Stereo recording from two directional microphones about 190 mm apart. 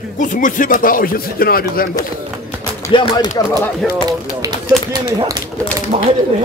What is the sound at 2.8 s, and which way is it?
Speech, 25° left (ahead or behind).